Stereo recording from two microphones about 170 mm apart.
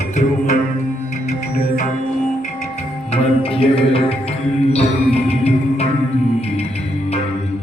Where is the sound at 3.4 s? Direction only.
35° left (ahead or behind).